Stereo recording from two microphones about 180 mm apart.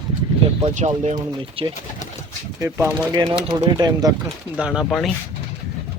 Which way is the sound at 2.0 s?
45° left (ahead or behind).